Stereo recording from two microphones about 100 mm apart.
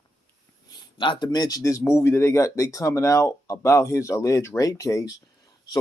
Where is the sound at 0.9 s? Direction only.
55° left (ahead or behind); by 5.1 s 30° left (ahead or behind).